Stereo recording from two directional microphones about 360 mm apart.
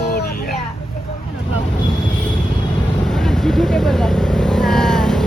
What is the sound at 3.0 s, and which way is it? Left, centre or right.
Vehicle, centre.